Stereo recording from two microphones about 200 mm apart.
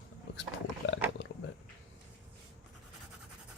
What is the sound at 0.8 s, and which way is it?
Roaring cats, 75° left (ahead or behind).